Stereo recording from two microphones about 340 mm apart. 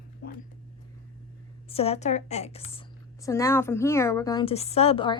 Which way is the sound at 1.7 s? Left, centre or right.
Centre.